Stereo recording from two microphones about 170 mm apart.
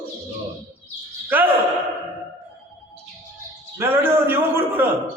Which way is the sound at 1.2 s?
10° right (ahead or behind).